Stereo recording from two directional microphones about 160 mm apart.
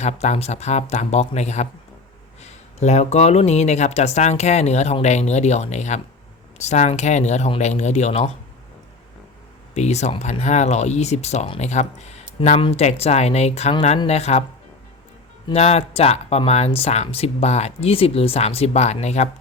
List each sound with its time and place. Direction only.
0.0 s speech: 45° left (ahead or behind)
9.7 s speech: 45° left (ahead or behind)
15.5 s speech: 40° left (ahead or behind)